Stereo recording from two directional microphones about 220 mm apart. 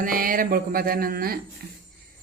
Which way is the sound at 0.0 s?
40° right (ahead or behind).